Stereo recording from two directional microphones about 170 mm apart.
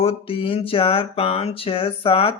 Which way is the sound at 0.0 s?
35° left (ahead or behind).